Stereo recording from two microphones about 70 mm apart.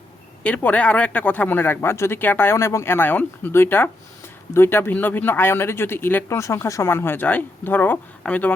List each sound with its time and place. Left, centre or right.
0.4 s speech: left
2.6 s speech: left
6.2 s speech: left
6.9 s speech: left